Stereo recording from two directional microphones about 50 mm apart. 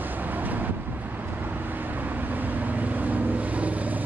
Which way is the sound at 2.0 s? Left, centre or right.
Right.